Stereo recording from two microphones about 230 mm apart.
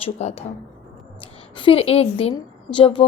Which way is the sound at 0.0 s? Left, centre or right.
Left.